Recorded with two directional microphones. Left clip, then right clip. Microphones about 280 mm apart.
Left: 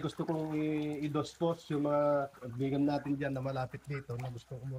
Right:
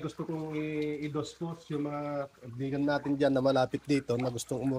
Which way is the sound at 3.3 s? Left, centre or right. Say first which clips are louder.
Right 11 dB; right.